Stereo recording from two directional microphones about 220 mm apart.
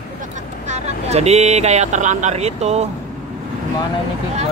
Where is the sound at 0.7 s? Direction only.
30° right (ahead or behind).